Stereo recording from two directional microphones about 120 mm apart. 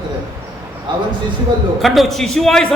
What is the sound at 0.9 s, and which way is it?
Speech, 40° right (ahead or behind).